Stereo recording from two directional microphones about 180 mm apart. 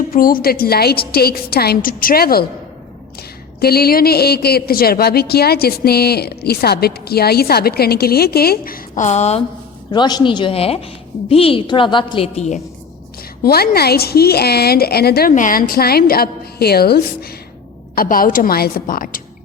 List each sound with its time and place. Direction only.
0.1 s a woman's voice: 50° left (ahead or behind)
9.9 s a woman's voice: 25° left (ahead or behind)
13.4 s a woman's voice: 60° left (ahead or behind)
15.3 s a woman's voice: 45° left (ahead or behind)